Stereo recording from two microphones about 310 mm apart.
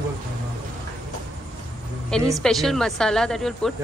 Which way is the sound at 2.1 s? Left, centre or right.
Centre.